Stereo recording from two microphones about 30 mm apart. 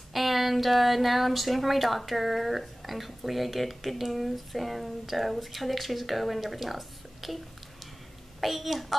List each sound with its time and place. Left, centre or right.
0.1 s speech: centre
8.4 s speech: centre